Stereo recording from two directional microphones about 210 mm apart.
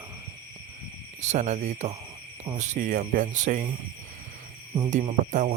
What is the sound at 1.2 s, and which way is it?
Speech, 35° right (ahead or behind).